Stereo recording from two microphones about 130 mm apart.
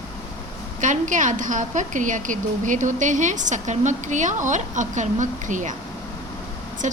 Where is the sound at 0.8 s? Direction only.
75° right (ahead or behind).